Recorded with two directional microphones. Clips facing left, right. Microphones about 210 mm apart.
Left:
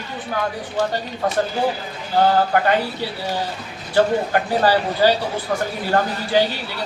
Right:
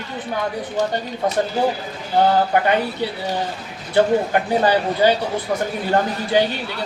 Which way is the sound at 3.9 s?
20° right (ahead or behind).